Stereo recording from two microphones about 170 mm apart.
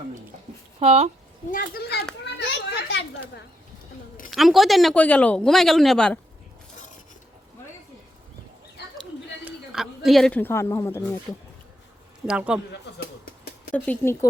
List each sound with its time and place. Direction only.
0.8 s speech: 40° right (ahead or behind)
1.5 s speech: 60° left (ahead or behind)
2.2 s children playing: 90° left
4.3 s speech: centre (ahead or behind)
9.4 s speech: centre (ahead or behind); by 11.1 s 15° left (ahead or behind)
12.2 s speech: 5° right (ahead or behind)
13.7 s speech: 10° left (ahead or behind)